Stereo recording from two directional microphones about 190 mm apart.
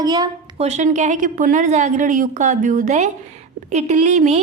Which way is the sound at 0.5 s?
35° right (ahead or behind).